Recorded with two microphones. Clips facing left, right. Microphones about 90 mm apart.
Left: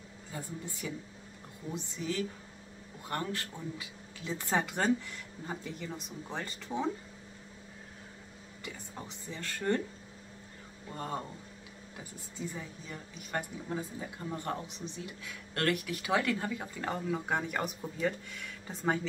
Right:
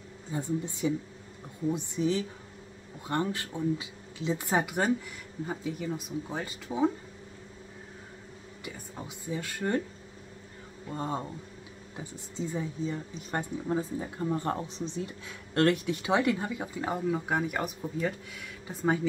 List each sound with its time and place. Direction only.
0.3 s a woman's voice: 20° right (ahead or behind)
8.6 s speech: 10° right (ahead or behind)
10.9 s a woman's voice: 20° right (ahead or behind)